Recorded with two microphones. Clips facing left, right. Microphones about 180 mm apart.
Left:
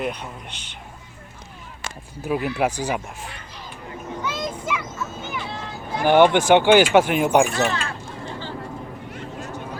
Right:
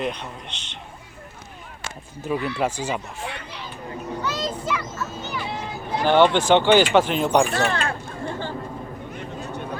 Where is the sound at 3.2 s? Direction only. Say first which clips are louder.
Right 5 dB; 70° right (ahead or behind).